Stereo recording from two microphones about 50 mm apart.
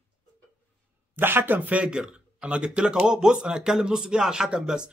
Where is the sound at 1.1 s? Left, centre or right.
Right.